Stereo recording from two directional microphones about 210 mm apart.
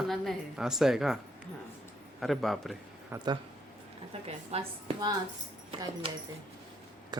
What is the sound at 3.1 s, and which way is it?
A woman's voice, 20° right (ahead or behind).